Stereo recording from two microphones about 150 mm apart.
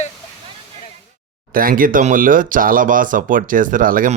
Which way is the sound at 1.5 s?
70° right (ahead or behind).